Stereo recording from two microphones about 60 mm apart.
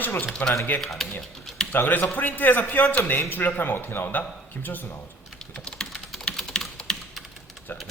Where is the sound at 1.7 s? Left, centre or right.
Left.